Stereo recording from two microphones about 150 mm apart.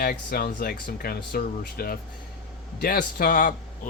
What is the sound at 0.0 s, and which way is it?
Speech, 75° left (ahead or behind).